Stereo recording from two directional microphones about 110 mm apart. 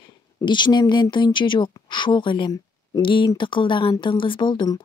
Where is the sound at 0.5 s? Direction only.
45° left (ahead or behind).